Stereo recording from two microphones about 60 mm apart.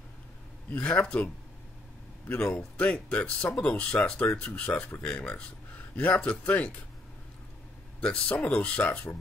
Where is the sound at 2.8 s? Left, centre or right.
Centre.